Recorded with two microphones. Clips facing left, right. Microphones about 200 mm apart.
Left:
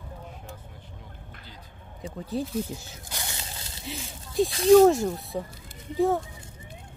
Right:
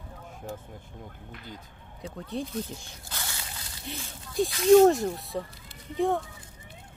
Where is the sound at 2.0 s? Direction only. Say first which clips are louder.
Left 3 dB; centre (ahead or behind).